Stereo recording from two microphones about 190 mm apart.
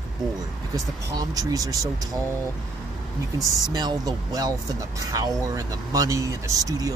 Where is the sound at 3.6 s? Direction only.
20° right (ahead or behind).